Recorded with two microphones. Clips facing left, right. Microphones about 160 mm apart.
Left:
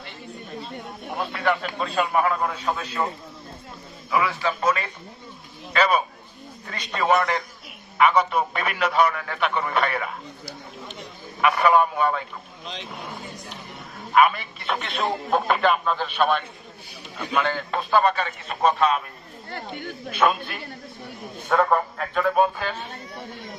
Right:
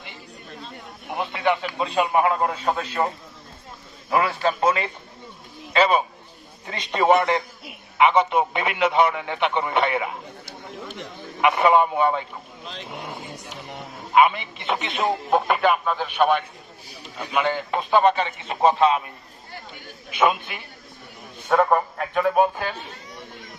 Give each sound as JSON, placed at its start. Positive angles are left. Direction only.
{"t": 1.1, "sound": "a man's voice", "side_deg": -15}
{"t": 2.7, "sound": "a man's voice", "side_deg": -40}
{"t": 4.1, "sound": "a man's voice", "side_deg": -50}
{"t": 4.6, "sound": "a man's voice", "side_deg": -25}
{"t": 14.1, "sound": "a man's voice", "side_deg": -20}
{"t": 19.5, "sound": "speech", "side_deg": 60}
{"t": 20.1, "sound": "speech", "side_deg": -15}